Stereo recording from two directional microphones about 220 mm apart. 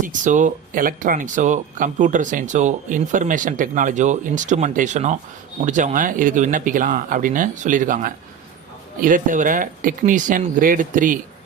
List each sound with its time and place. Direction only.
0.0 s speech: 35° right (ahead or behind)